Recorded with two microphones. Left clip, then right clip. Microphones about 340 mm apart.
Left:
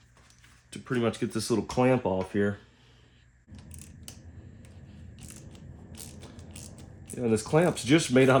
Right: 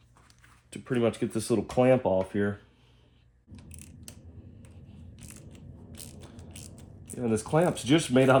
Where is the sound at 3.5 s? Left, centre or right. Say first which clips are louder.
Even; centre.